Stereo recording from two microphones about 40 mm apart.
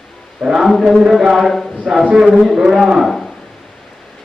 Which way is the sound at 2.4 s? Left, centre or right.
Centre.